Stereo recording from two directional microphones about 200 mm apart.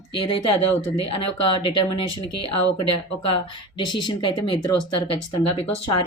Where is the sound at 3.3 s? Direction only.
25° left (ahead or behind).